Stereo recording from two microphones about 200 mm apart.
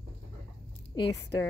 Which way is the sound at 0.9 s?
20° left (ahead or behind).